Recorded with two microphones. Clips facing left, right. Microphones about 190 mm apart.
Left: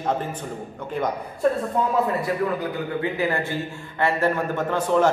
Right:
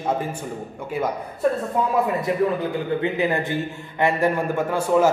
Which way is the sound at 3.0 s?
20° right (ahead or behind).